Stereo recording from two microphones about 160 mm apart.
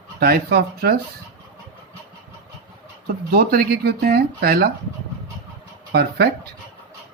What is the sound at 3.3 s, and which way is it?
Speech, 70° right (ahead or behind).